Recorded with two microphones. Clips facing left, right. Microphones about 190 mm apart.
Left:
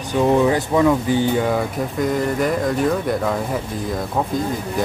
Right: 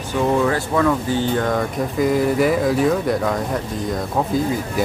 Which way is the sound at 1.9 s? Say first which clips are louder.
Right 4 dB; 5° right (ahead or behind).